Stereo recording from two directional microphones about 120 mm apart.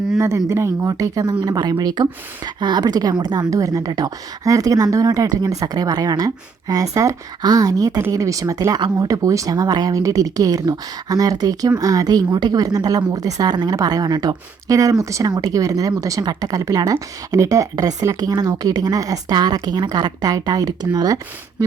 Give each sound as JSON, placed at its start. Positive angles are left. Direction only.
{"t": 0.2, "sound": "speech", "side_deg": -25}